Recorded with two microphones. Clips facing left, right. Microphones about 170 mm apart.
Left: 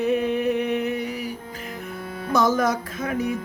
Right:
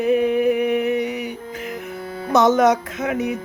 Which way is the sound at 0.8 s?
65° right (ahead or behind).